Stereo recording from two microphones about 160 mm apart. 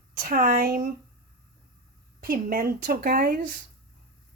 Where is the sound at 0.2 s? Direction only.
60° right (ahead or behind).